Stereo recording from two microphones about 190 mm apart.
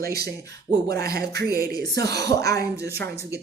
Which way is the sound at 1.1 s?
55° right (ahead or behind).